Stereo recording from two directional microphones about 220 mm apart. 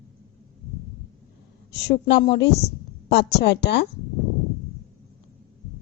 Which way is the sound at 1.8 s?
50° left (ahead or behind).